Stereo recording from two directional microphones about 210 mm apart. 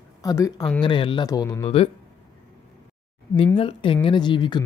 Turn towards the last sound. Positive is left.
turn(degrees=20)  # may be behind; listen again after turning